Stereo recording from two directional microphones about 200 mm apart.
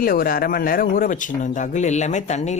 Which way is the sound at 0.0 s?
45° left (ahead or behind).